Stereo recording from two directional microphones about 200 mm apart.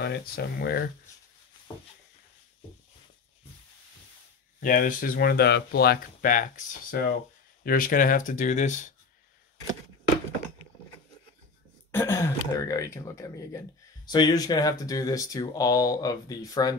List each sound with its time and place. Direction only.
0.0 s speech: 55° left (ahead or behind)
4.6 s speech: 45° left (ahead or behind)
11.9 s speech: 15° left (ahead or behind)